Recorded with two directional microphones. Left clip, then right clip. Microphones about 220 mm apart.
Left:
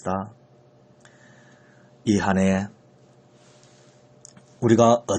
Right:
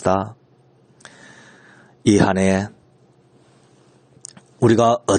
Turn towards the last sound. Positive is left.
turn(degrees=-40)  # may be behind; listen again after turning